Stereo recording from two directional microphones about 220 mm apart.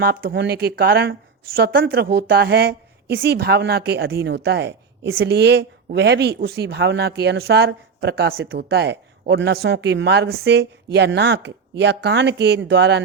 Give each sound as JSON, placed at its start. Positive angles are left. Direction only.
{"t": 0.0, "sound": "speech", "side_deg": -45}